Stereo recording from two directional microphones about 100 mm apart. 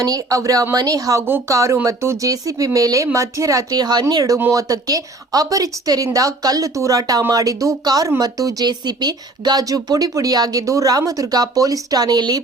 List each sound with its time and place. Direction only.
0.0 s speech: 35° right (ahead or behind)